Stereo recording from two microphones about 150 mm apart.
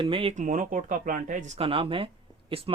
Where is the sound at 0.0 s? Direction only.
35° right (ahead or behind).